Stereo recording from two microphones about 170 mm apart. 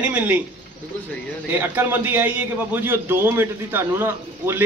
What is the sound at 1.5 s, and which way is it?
A man's voice, 10° right (ahead or behind).